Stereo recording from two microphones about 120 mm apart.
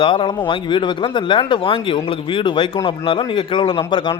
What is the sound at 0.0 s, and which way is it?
A man's voice, 45° left (ahead or behind).